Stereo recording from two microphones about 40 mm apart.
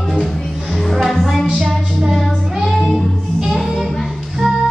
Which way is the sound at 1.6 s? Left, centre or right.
Centre.